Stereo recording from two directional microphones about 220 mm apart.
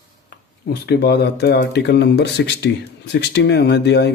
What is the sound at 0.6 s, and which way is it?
Speech, 45° left (ahead or behind).